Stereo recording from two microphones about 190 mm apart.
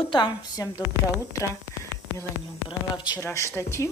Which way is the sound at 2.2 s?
25° left (ahead or behind).